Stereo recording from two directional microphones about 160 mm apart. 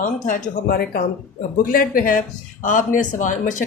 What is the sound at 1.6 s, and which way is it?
Speech, 60° left (ahead or behind).